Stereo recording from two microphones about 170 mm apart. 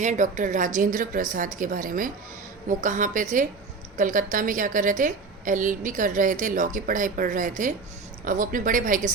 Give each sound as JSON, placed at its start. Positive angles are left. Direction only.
{"t": 0.0, "sound": "a woman's voice", "side_deg": -45}